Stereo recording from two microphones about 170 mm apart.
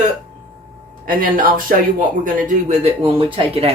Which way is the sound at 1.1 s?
55° right (ahead or behind).